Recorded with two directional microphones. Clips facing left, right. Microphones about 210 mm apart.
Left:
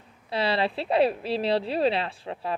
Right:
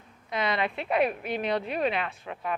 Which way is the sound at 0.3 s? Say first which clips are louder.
Left 3 dB; 30° left (ahead or behind).